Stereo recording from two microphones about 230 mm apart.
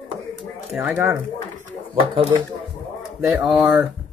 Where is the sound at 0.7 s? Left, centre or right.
Centre.